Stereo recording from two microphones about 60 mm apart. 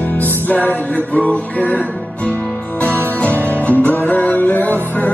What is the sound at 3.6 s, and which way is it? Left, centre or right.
Music, left.